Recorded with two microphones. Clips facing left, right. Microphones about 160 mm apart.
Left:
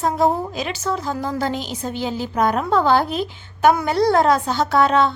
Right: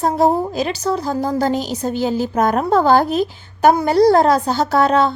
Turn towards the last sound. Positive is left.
turn(degrees=-40)  # may be behind; listen again after turning